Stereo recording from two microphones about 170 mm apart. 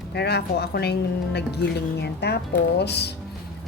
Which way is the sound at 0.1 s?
75° left (ahead or behind).